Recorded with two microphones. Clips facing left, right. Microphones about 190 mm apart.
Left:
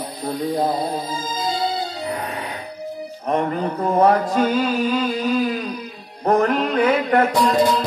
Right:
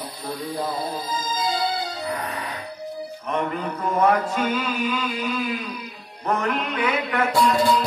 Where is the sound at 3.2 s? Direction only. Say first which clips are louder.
Left 5 dB; 40° left (ahead or behind).